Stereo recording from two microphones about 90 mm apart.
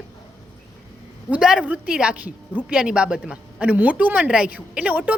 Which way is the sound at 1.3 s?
10° right (ahead or behind).